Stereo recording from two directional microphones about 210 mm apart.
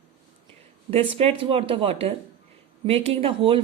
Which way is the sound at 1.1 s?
30° right (ahead or behind).